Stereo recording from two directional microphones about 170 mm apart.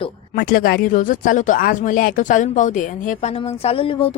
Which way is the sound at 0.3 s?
60° left (ahead or behind).